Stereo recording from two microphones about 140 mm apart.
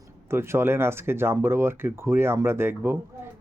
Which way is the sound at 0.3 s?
20° right (ahead or behind).